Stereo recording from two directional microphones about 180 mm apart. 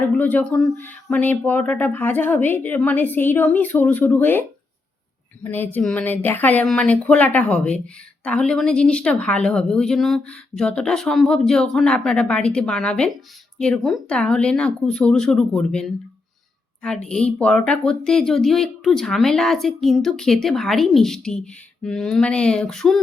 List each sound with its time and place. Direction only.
0.2 s a woman's voice: 10° left (ahead or behind)